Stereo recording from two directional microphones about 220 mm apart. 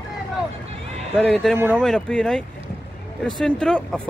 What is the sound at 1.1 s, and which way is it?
Speech, centre (ahead or behind).